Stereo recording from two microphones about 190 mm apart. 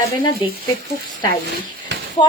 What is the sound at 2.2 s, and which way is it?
Speech, 25° left (ahead or behind).